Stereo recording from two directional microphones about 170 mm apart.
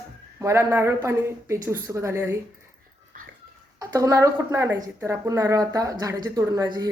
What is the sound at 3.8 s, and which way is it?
A woman's voice, 20° right (ahead or behind).